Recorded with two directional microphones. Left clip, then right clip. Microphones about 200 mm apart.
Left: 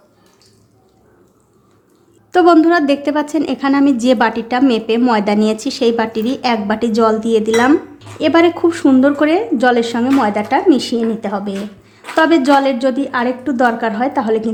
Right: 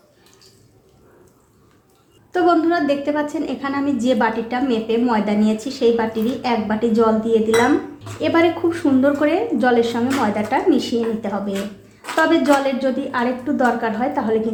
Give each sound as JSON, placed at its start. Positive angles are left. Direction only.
{"t": 2.3, "sound": "a woman's voice", "side_deg": 45}